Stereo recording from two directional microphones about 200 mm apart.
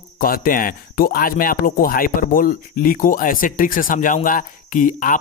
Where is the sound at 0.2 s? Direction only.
45° left (ahead or behind).